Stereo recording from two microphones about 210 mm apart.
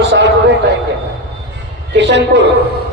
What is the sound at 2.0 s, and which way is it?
Speech, 55° right (ahead or behind).